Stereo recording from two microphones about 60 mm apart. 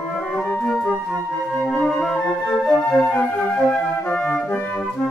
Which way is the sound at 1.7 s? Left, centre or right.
Centre.